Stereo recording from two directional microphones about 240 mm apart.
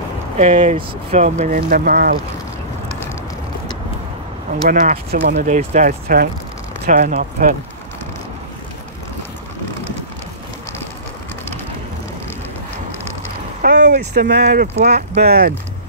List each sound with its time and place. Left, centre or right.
0.4 s speech: right
4.6 s speech: right
13.6 s speech: right
15.2 s speech: right